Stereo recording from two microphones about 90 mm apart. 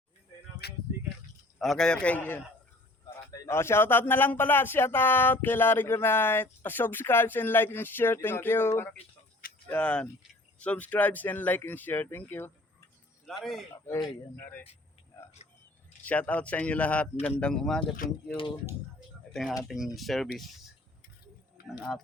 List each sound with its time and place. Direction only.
1.5 s speech: 5° left (ahead or behind); by 2.4 s 20° left (ahead or behind)
3.5 s speech: 30° left (ahead or behind)
13.2 s speech: centre (ahead or behind)
16.0 s speech: 15° left (ahead or behind)
19.3 s speech: centre (ahead or behind)